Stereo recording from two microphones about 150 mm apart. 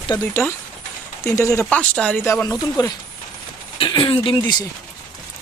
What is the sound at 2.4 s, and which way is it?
Speech, 25° left (ahead or behind).